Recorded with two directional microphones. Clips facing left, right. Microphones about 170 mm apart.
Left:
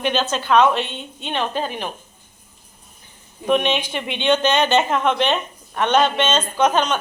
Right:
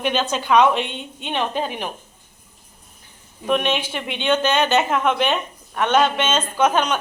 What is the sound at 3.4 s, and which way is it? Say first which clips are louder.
Speech: left 2 dB; 5° right (ahead or behind).